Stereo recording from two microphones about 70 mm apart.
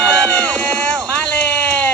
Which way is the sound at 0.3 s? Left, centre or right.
Left.